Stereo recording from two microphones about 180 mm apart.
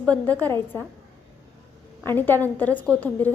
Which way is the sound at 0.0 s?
5° left (ahead or behind).